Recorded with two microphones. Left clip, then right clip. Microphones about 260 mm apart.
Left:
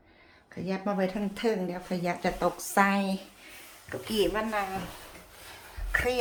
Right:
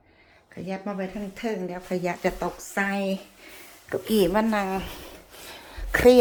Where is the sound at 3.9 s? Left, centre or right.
Right.